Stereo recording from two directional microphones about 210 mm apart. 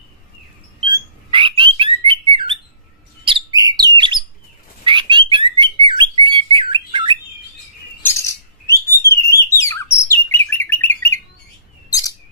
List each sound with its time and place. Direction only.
0.8 s bird: 25° right (ahead or behind)
8.0 s bird: 15° left (ahead or behind)
11.9 s chirp: 15° left (ahead or behind)